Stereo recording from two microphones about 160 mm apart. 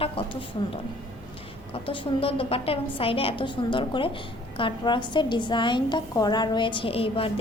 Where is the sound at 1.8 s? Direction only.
35° left (ahead or behind).